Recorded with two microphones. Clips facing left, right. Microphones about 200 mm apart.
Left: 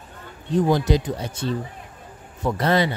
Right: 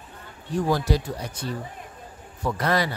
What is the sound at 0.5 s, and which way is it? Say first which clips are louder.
Speech: left 4 dB; 20° left (ahead or behind).